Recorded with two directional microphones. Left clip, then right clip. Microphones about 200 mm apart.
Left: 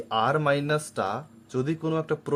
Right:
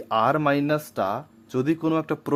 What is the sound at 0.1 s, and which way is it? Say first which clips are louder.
Speech: right 3 dB; 30° right (ahead or behind).